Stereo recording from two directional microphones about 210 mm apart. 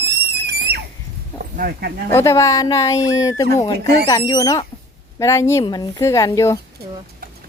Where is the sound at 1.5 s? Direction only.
45° right (ahead or behind).